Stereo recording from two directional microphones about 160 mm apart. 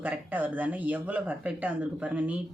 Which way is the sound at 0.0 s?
10° right (ahead or behind).